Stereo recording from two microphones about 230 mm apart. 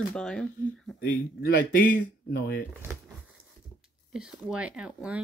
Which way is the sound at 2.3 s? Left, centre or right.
Left.